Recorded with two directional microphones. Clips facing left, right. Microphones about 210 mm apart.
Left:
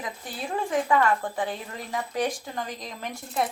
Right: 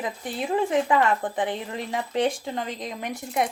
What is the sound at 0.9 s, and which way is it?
A woman's voice, 20° right (ahead or behind).